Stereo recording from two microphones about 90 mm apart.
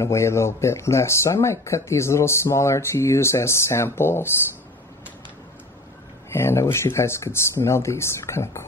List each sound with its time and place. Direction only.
0.0 s speech: 30° left (ahead or behind)
6.3 s speech: 30° left (ahead or behind)